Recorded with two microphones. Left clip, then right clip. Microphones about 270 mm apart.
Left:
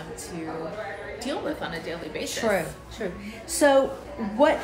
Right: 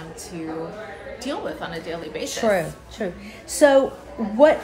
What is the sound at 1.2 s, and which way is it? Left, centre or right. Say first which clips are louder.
A woman's voice: right 2 dB; centre.